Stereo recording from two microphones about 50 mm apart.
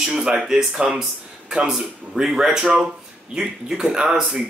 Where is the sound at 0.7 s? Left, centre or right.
Centre.